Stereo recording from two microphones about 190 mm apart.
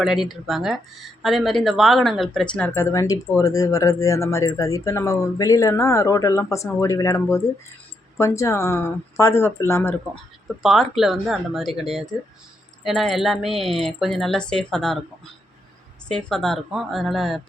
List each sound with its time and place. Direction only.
0.0 s speech: centre (ahead or behind); by 9.9 s 15° left (ahead or behind)
10.6 s speech: centre (ahead or behind)
16.0 s speech: 5° left (ahead or behind)